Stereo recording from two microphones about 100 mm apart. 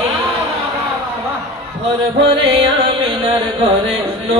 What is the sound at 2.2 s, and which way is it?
Music, 70° right (ahead or behind).